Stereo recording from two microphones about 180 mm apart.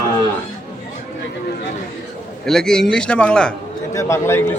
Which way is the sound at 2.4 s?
5° left (ahead or behind).